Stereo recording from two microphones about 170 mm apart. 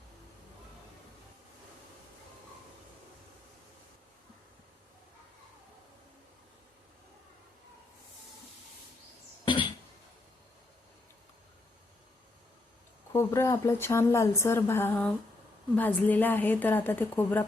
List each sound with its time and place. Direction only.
9.4 s cough: 30° left (ahead or behind)
13.1 s speech: 15° left (ahead or behind)